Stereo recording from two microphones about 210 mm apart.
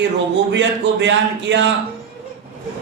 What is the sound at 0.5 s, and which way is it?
Speech, 55° right (ahead or behind).